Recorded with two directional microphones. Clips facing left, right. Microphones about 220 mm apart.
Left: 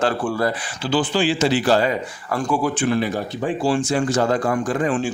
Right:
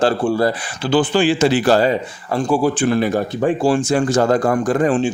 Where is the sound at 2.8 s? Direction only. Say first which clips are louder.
Right 4 dB; 45° right (ahead or behind).